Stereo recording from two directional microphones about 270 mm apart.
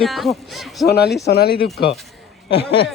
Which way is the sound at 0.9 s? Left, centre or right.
Left.